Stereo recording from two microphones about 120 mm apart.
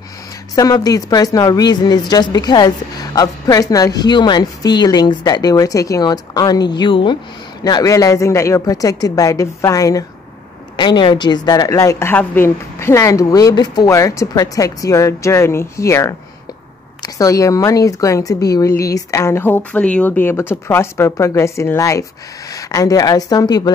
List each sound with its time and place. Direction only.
0.6 s a woman's voice: 30° left (ahead or behind)
7.6 s a woman's voice: 30° left (ahead or behind)
10.8 s a woman's voice: 40° left (ahead or behind)